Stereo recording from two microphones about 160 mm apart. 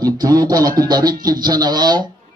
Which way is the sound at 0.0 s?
25° right (ahead or behind).